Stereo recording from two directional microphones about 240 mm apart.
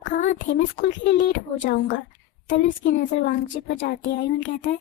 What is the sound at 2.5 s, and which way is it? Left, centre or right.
Speech, left.